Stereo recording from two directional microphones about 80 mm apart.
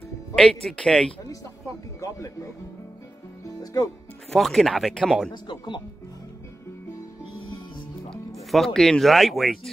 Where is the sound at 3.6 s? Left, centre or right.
Left.